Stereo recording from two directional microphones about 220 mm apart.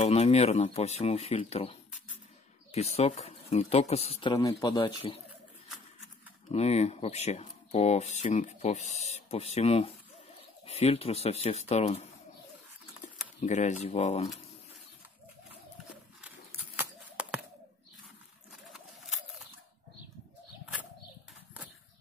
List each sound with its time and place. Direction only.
0.0 s speech: 30° left (ahead or behind)
6.5 s speech: 30° left (ahead or behind)
13.4 s speech: 35° left (ahead or behind)
16.2 s a sound: 5° right (ahead or behind)
18.5 s bird: centre (ahead or behind)